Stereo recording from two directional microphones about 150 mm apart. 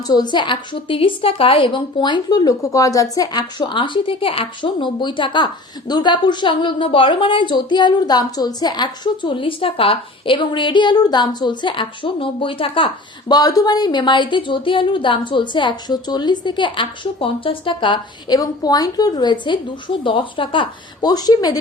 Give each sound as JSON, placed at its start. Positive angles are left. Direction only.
{"t": 0.1, "sound": "a woman's voice", "side_deg": 30}